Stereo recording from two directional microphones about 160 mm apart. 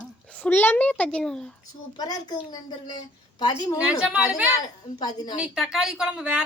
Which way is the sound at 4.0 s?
10° right (ahead or behind).